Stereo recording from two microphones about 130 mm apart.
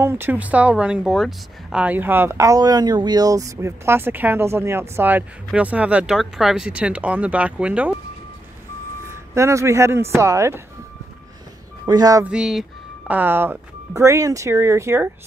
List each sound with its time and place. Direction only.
0.0 s speech: 15° right (ahead or behind)
9.3 s speech: 20° right (ahead or behind)
11.8 s speech: 30° right (ahead or behind)
12.3 s music: 5° right (ahead or behind)
13.1 s speech: 15° right (ahead or behind)